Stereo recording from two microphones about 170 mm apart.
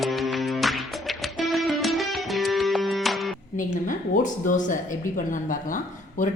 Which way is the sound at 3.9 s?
50° left (ahead or behind).